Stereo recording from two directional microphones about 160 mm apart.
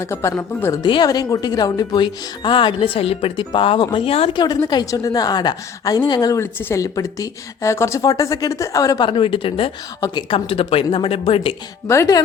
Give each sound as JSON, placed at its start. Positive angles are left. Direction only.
{"t": 0.0, "sound": "speech", "side_deg": 15}
{"t": 9.0, "sound": "speech", "side_deg": 35}
{"t": 11.9, "sound": "speech", "side_deg": 20}